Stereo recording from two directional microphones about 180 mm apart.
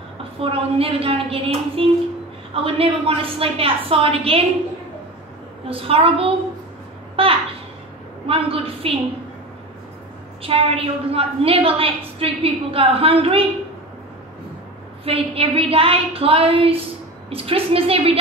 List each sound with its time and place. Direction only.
0.4 s a woman's voice: 30° right (ahead or behind)
5.7 s a woman's voice: 30° right (ahead or behind)
10.4 s a woman's voice: 30° right (ahead or behind)
15.0 s a woman's voice: 30° right (ahead or behind)